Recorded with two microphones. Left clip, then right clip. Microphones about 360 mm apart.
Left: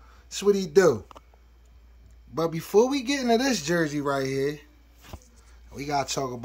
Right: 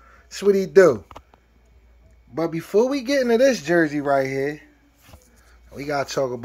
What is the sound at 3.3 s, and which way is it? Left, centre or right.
Speech, left.